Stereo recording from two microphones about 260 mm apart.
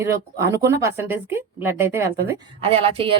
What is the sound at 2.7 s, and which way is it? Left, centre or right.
Speech, right.